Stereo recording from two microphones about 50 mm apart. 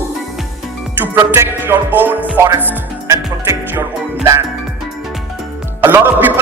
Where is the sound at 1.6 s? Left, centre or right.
Right.